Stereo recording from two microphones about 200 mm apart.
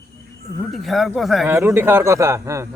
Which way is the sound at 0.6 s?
Centre (ahead or behind).